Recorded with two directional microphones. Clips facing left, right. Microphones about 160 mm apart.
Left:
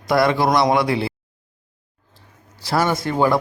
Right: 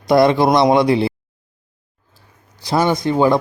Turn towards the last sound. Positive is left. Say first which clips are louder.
# right 4 dB
turn(degrees=-20)  # may be behind; listen again after turning